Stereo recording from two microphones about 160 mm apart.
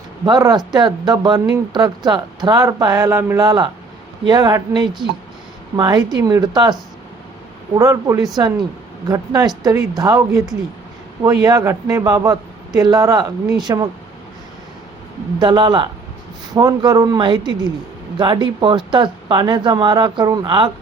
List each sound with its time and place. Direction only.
0.3 s speech: 25° right (ahead or behind)
15.4 s speech: 25° right (ahead or behind)